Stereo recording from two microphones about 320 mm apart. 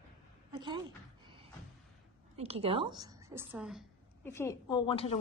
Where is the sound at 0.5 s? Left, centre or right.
Centre.